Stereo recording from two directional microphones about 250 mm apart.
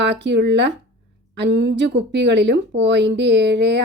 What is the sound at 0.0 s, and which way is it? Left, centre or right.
Speech, right.